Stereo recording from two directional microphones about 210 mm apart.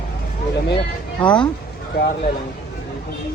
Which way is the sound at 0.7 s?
25° left (ahead or behind).